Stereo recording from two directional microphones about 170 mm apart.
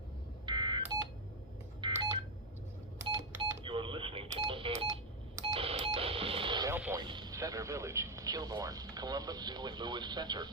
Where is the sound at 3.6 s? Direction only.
30° right (ahead or behind).